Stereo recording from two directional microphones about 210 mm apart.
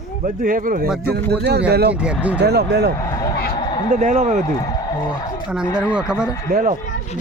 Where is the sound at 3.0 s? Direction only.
15° left (ahead or behind).